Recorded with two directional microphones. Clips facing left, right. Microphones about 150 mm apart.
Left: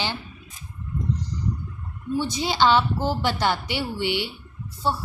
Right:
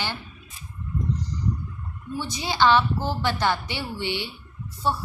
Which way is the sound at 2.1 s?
15° left (ahead or behind).